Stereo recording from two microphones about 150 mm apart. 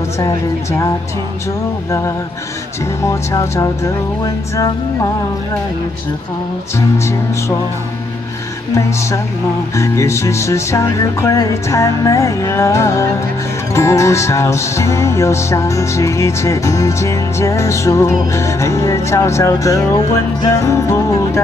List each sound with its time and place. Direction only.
0.2 s music: 20° left (ahead or behind)
9.8 s music: 20° left (ahead or behind)